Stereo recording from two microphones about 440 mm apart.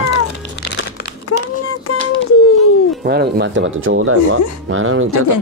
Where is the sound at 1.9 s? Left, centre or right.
Left.